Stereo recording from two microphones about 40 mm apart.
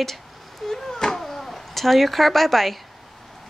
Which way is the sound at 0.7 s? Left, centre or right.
Centre.